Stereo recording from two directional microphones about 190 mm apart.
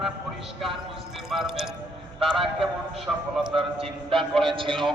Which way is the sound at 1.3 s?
Centre (ahead or behind).